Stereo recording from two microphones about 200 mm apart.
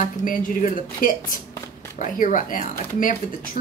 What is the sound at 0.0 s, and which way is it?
Speech, 40° left (ahead or behind).